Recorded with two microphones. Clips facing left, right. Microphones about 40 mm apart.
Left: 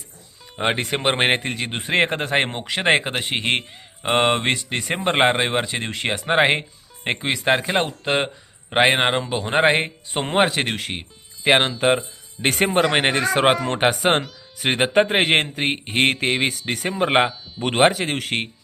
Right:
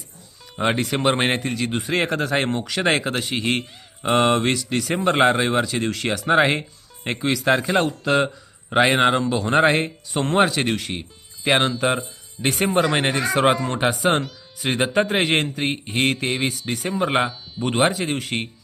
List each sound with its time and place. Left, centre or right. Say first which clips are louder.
0.5 s a man's voice: right 1 dB; centre
12.4 s speech: left 1 dB; left